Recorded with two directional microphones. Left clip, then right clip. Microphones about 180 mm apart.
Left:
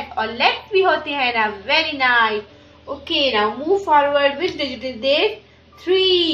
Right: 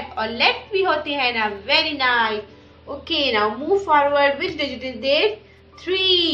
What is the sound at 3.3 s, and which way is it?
A woman's voice, 40° left (ahead or behind).